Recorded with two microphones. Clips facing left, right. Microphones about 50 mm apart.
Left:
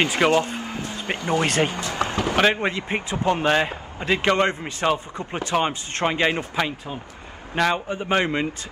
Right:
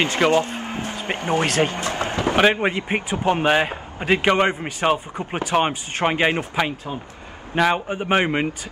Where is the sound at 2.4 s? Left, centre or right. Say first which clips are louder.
Right 2 dB; centre.